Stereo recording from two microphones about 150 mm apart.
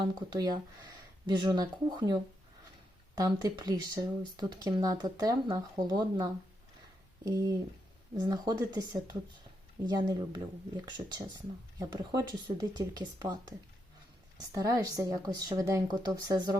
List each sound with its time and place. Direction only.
0.0 s speech: 30° right (ahead or behind)
3.2 s speech: 25° right (ahead or behind)